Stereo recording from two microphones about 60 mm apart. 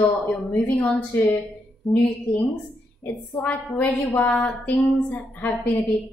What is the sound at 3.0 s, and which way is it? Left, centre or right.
A woman's voice, left.